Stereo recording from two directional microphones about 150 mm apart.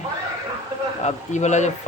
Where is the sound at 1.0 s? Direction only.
50° left (ahead or behind).